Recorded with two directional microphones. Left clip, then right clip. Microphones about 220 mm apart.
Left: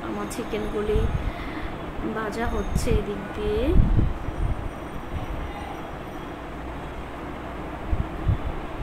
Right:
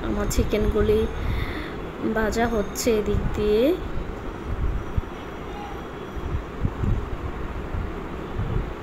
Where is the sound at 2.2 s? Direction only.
25° right (ahead or behind).